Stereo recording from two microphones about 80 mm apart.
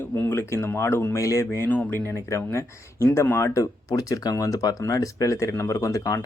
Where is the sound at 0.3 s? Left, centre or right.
Left.